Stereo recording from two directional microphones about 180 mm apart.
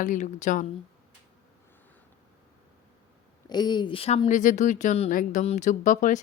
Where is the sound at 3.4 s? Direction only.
25° left (ahead or behind).